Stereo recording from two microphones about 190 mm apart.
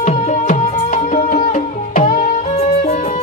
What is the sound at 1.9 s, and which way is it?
Music, 45° left (ahead or behind).